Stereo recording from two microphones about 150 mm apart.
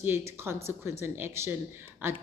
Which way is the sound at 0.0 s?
15° right (ahead or behind).